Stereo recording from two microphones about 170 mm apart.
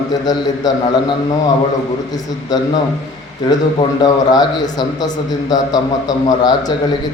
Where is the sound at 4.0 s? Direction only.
25° left (ahead or behind).